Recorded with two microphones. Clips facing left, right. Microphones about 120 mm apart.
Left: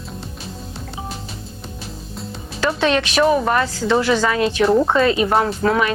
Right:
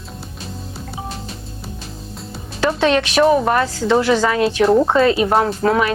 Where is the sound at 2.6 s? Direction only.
30° right (ahead or behind).